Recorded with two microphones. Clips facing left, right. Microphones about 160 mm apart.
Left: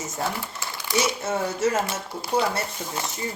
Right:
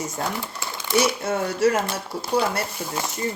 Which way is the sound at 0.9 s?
25° left (ahead or behind).